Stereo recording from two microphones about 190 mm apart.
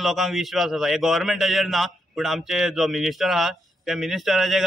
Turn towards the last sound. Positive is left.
turn(degrees=0)  # may be behind; listen again after turning